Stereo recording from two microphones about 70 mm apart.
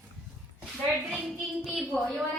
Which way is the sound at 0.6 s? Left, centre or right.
Centre.